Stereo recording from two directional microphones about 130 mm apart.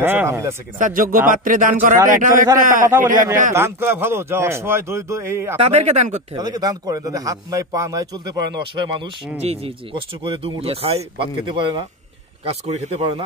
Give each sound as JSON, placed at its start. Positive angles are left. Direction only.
{"t": 0.0, "sound": "speech", "side_deg": -15}
{"t": 0.7, "sound": "speech", "side_deg": -90}
{"t": 3.5, "sound": "speech", "side_deg": -20}
{"t": 5.6, "sound": "speech", "side_deg": -55}
{"t": 6.3, "sound": "speech", "side_deg": -30}
{"t": 9.4, "sound": "speech", "side_deg": -50}
{"t": 10.2, "sound": "speech", "side_deg": -40}
{"t": 12.4, "sound": "speech", "side_deg": -60}